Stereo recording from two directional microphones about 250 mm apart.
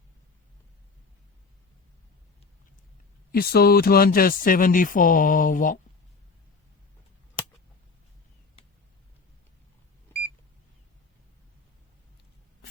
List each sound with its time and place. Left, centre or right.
3.3 s speech: left